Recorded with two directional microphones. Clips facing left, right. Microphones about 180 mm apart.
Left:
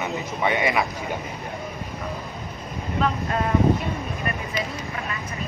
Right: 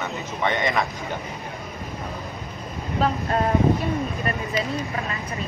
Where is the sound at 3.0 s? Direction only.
35° right (ahead or behind).